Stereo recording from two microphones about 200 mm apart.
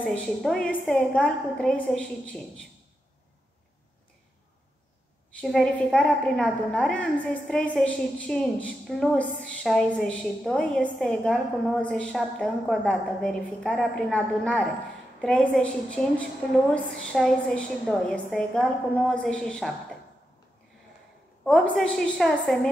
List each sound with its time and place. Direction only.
0.0 s a woman's voice: 5° left (ahead or behind)
5.3 s a woman's voice: centre (ahead or behind)
21.5 s a woman's voice: 5° left (ahead or behind)